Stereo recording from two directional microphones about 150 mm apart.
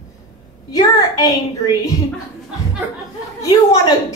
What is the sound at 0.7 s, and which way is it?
A woman's voice, 25° left (ahead or behind).